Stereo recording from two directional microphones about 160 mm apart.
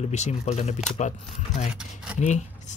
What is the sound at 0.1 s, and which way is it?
Speech, 45° left (ahead or behind).